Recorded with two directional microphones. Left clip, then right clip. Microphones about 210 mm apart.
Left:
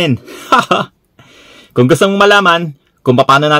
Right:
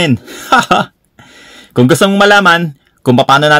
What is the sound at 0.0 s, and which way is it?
Speech, 20° right (ahead or behind).